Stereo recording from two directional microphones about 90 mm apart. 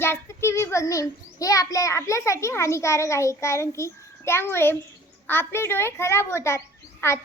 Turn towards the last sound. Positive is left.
turn(degrees=30)  # may be behind; listen again after turning